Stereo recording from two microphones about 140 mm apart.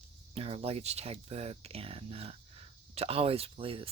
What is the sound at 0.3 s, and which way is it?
Speech, 45° right (ahead or behind).